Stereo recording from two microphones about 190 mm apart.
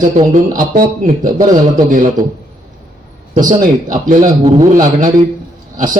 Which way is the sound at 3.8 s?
45° right (ahead or behind).